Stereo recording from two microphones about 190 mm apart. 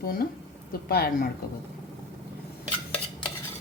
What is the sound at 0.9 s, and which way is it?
Speech, 55° left (ahead or behind).